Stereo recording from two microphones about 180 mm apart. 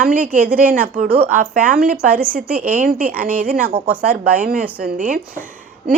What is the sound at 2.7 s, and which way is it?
Speech, 50° right (ahead or behind).